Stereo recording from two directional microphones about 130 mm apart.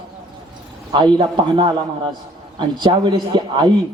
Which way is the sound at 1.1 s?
40° right (ahead or behind).